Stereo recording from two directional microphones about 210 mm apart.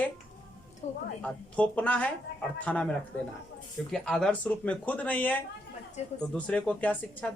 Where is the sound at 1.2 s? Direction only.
5° left (ahead or behind).